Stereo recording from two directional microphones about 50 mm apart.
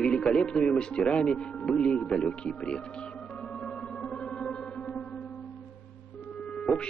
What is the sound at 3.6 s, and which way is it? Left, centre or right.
Music, centre.